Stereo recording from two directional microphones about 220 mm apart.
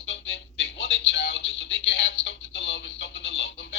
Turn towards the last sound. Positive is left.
turn(degrees=50)  # may be behind; listen again after turning